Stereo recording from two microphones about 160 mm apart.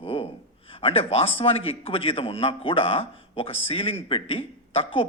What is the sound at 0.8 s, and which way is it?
A man's voice, 35° left (ahead or behind).